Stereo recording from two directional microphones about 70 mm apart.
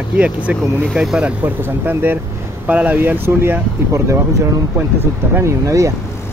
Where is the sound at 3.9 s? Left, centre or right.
Right.